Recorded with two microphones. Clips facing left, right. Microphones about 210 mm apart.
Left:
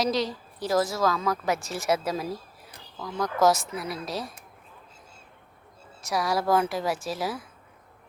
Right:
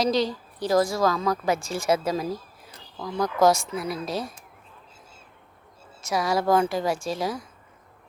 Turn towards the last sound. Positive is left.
turn(degrees=5)  # may be behind; listen again after turning